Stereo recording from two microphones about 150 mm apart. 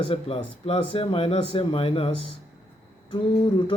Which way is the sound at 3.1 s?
30° left (ahead or behind).